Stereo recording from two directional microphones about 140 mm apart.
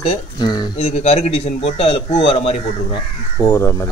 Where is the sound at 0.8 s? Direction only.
50° left (ahead or behind).